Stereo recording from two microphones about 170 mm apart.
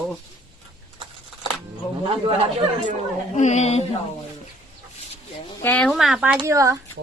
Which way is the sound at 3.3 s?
40° left (ahead or behind).